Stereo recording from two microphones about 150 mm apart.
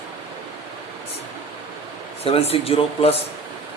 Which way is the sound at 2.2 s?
40° left (ahead or behind).